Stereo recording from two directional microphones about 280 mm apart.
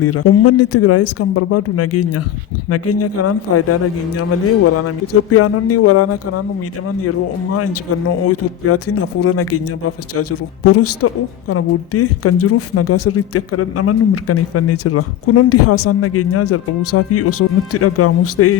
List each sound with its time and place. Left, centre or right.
0.0 s speech: left
7.5 s speech: left